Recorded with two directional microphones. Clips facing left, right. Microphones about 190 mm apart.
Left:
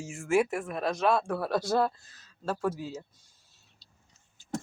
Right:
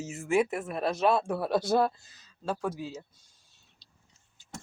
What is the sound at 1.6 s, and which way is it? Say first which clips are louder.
Speech: right 1 dB; 5° right (ahead or behind).